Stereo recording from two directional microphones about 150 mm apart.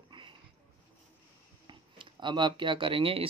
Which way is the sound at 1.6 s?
30° right (ahead or behind).